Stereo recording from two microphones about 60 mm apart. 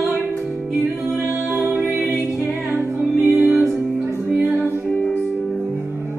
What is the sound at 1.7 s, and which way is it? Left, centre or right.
Music, centre.